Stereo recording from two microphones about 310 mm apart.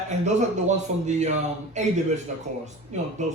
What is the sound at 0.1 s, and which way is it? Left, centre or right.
A man's voice, right.